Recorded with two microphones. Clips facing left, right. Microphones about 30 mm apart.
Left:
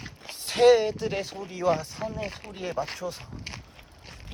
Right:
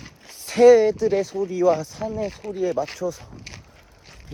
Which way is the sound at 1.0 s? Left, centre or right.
Left.